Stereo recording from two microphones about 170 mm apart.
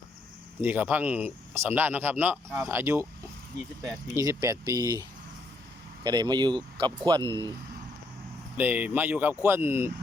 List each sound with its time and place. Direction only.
0.6 s speech: 10° right (ahead or behind)
4.2 s speech: 20° right (ahead or behind)
8.5 s speech: 10° right (ahead or behind)